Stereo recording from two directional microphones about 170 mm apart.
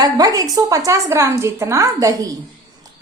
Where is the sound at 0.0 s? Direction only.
20° right (ahead or behind).